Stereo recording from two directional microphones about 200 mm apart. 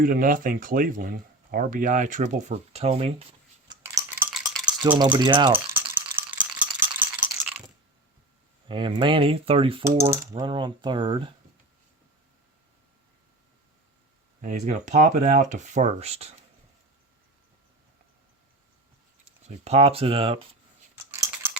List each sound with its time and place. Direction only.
0.0 s speech: 45° right (ahead or behind)
3.7 s a sound: 15° right (ahead or behind)
4.3 s rattle: 5° right (ahead or behind)
5.1 s coin: 25° right (ahead or behind)
5.5 s rattle: 10° right (ahead or behind)
7.2 s a sound: 5° right (ahead or behind)
8.6 s coin: 25° right (ahead or behind)
9.8 s coin: 15° right (ahead or behind)
14.4 s speech: 40° right (ahead or behind)
19.5 s coin: 30° right (ahead or behind)
21.1 s scissors: 10° right (ahead or behind)